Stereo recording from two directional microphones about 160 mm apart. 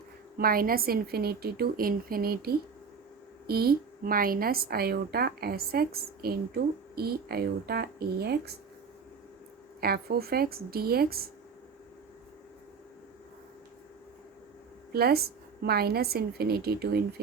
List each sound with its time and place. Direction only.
0.3 s a woman's voice: 65° right (ahead or behind); by 8.5 s 85° right
9.8 s a woman's voice: 75° right (ahead or behind)
14.9 s a woman's voice: 75° right (ahead or behind)